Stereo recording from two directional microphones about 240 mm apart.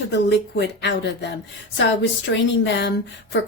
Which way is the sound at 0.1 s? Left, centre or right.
Left.